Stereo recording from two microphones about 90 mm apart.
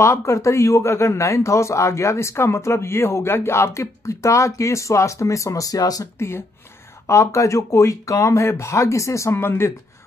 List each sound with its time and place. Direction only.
0.0 s speech: 35° left (ahead or behind)
6.1 s speech: 30° left (ahead or behind)